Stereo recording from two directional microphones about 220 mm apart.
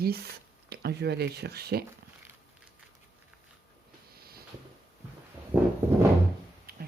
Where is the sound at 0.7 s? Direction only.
45° right (ahead or behind).